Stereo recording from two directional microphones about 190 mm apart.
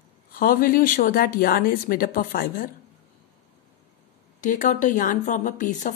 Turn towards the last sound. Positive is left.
turn(degrees=40)  # may be behind; listen again after turning